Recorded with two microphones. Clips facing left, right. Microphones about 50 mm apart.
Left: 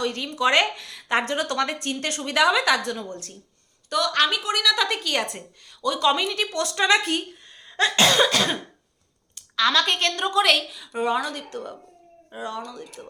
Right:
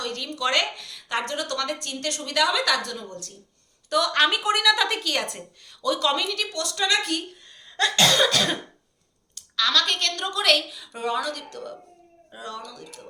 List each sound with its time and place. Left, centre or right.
0.0 s a woman's voice: centre; by 3.3 s left
3.8 s speech: centre
4.7 s a woman's voice: centre
6.2 s a woman's voice: left
7.4 s cough: centre
9.6 s a woman's voice: centre
12.4 s speech: centre